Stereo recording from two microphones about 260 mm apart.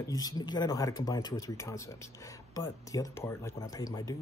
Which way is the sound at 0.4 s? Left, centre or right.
Centre.